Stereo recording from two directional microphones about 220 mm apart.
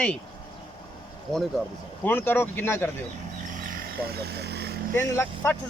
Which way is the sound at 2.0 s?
10° left (ahead or behind).